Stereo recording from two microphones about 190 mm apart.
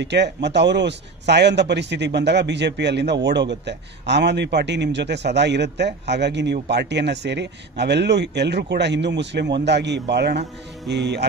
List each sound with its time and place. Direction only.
0.0 s a man's voice: 65° right (ahead or behind)